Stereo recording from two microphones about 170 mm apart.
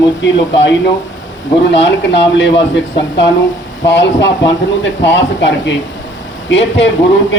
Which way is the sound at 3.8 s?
90° left.